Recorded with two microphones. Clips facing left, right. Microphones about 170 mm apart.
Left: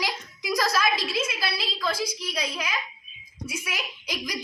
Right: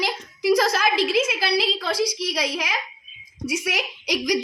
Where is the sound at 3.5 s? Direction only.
80° right.